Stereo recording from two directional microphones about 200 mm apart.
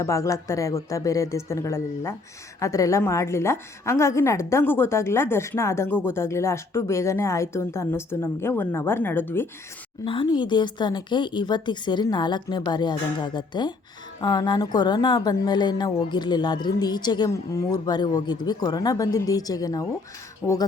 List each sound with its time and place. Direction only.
0.0 s speech: 15° left (ahead or behind)
10.0 s a woman's voice: 25° left (ahead or behind)